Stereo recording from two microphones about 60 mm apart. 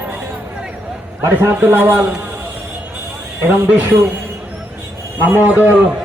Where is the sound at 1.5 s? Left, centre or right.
Right.